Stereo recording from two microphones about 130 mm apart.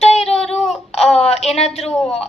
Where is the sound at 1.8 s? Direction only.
5° left (ahead or behind).